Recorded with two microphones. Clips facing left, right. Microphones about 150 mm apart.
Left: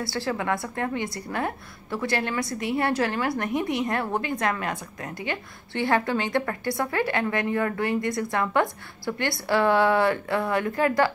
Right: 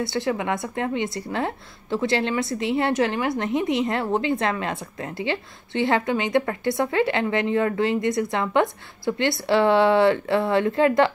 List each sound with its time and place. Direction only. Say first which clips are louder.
0.0 s a woman's voice: right 3 dB; 20° right (ahead or behind)